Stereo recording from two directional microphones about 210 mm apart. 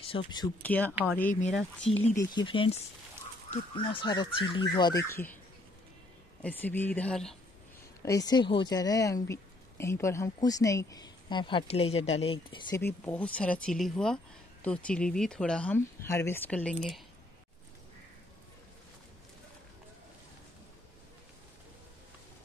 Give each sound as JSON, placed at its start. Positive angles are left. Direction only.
{"t": 0.0, "sound": "speech", "side_deg": 25}
{"t": 0.6, "sound": "speech", "side_deg": 10}
{"t": 2.1, "sound": "speech", "side_deg": 20}
{"t": 6.4, "sound": "speech", "side_deg": 10}
{"t": 8.0, "sound": "speech", "side_deg": 15}